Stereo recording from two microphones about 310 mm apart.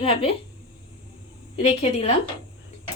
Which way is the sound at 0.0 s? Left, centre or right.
Centre.